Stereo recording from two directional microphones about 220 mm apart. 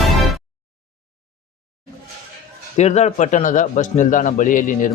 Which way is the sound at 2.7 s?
30° left (ahead or behind).